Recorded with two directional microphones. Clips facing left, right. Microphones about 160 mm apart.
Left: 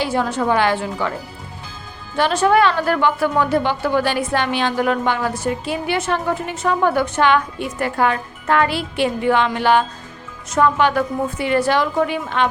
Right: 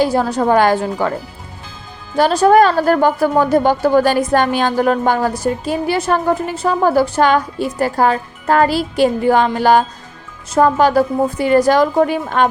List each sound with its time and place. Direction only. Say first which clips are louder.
0.0 s a woman's voice: right 5 dB; 40° right (ahead or behind)
2.1 s a woman's voice: right 5 dB; 40° right (ahead or behind)